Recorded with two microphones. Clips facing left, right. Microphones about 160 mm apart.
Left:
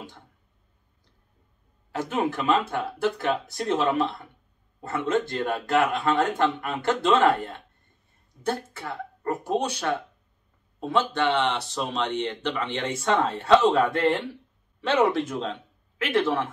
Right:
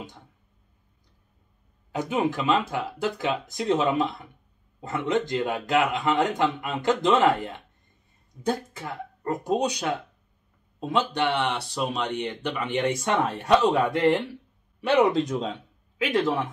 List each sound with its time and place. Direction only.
1.9 s speech: 15° right (ahead or behind)
8.5 s speech: 15° right (ahead or behind)